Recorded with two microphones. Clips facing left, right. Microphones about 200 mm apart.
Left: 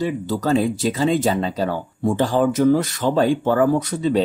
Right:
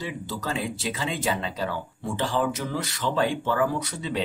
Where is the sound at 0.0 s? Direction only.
45° left (ahead or behind).